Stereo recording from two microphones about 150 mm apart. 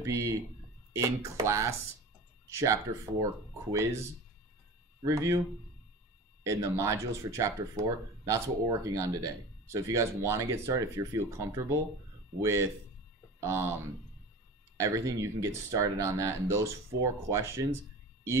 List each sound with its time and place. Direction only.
0.0 s speech: 20° right (ahead or behind)
5.0 s speech: 20° right (ahead or behind)
6.4 s speech: 20° right (ahead or behind)
14.8 s speech: 20° right (ahead or behind)